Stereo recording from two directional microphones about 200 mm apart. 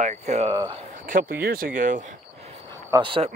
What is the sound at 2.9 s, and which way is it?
Speech, 25° right (ahead or behind).